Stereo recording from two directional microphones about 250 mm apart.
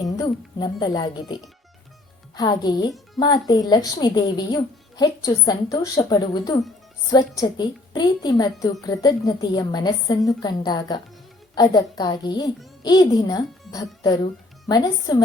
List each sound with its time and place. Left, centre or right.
0.0 s a woman's voice: centre